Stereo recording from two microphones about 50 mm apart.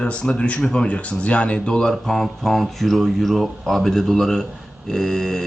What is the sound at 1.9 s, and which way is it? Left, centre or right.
Speech, centre.